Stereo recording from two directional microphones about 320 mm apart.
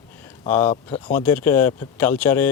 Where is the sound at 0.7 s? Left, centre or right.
Centre.